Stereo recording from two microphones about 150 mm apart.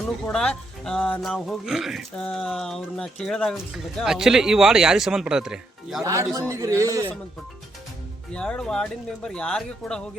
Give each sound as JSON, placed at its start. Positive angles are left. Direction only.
{"t": 0.3, "sound": "speech", "side_deg": 5}
{"t": 6.0, "sound": "a man's voice", "side_deg": -20}
{"t": 8.3, "sound": "speech", "side_deg": 5}